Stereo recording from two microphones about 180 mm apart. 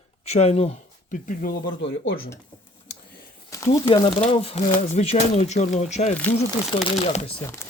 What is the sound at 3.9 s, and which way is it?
Speech, 30° left (ahead or behind).